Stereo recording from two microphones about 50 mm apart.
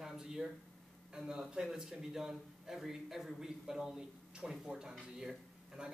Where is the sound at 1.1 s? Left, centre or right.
Centre.